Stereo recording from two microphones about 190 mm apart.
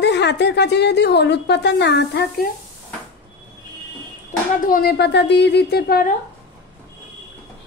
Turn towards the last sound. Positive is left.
turn(degrees=55)  # may be behind; listen again after turning